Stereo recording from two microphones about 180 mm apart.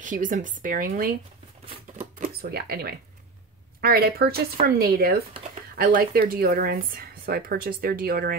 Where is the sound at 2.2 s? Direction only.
55° right (ahead or behind).